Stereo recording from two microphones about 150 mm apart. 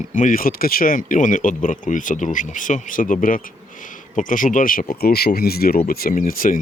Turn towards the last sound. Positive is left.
turn(degrees=70)  # may be behind; listen again after turning